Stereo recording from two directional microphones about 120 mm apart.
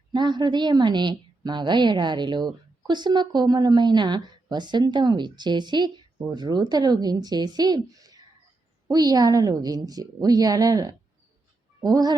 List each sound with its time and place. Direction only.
0.1 s a woman's voice: 40° right (ahead or behind)